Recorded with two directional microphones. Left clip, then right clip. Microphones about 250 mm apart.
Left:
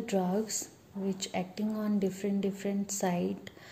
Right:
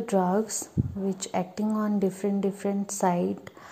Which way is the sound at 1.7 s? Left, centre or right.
Centre.